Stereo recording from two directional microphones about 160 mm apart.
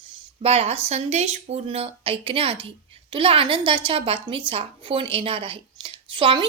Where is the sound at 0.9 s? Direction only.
45° right (ahead or behind).